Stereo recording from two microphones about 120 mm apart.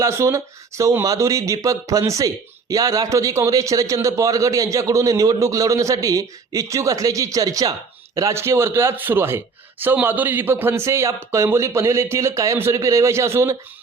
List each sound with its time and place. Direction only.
0.0 s speech: 25° right (ahead or behind)